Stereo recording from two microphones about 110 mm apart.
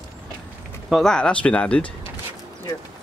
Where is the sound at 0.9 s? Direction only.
5° left (ahead or behind).